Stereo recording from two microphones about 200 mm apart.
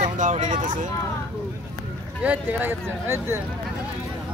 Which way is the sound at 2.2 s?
10° right (ahead or behind).